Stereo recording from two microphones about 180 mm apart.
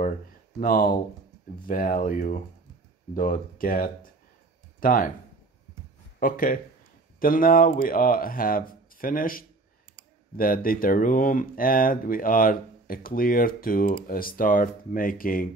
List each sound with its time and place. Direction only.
0.6 s speech: 50° left (ahead or behind)
6.1 s speech: 50° left (ahead or behind)